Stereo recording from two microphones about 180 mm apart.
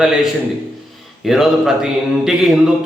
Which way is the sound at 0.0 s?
5° right (ahead or behind).